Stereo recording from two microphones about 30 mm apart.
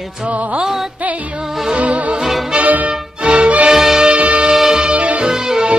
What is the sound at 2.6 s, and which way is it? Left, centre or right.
Music, right.